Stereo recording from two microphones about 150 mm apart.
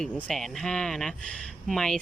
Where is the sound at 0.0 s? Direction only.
5° left (ahead or behind).